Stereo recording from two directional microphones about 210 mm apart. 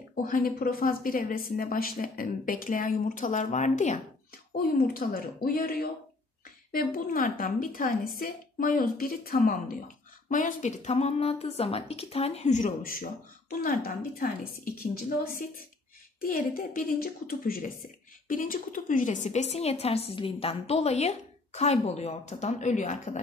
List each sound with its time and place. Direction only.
0.1 s a woman's voice: 40° left (ahead or behind)
16.2 s a woman's voice: 40° left (ahead or behind)